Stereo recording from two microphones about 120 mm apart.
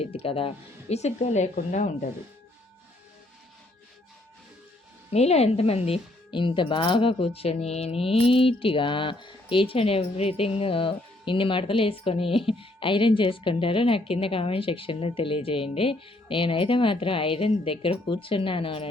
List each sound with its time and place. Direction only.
0.0 s speech: 55° left (ahead or behind); by 2.0 s 90° left
5.1 s speech: 60° left (ahead or behind)
6.3 s speech: 45° left (ahead or behind)